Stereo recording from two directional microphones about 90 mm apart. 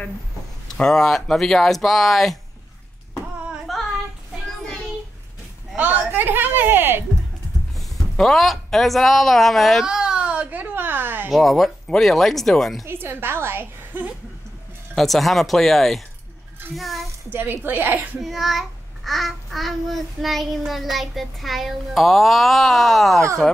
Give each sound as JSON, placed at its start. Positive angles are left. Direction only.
{"t": 0.7, "sound": "a child's voice", "side_deg": 5}
{"t": 3.7, "sound": "child singing", "side_deg": 0}
{"t": 5.8, "sound": "a sound", "side_deg": -20}
{"t": 8.2, "sound": "a sound", "side_deg": 0}
{"t": 11.2, "sound": "a child's voice", "side_deg": 0}
{"t": 12.8, "sound": "a woman's voice", "side_deg": -25}
{"t": 15.0, "sound": "a child's voice", "side_deg": 0}
{"t": 17.3, "sound": "a woman's voice", "side_deg": -25}
{"t": 18.2, "sound": "a child's voice", "side_deg": 0}